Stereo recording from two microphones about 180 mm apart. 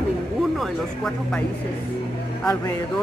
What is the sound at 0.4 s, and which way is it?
Speech, centre (ahead or behind).